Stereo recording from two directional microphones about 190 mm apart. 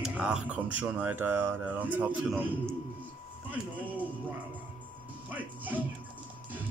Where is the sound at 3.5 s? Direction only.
10° right (ahead or behind).